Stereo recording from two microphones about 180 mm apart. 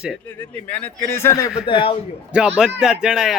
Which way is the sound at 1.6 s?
30° left (ahead or behind).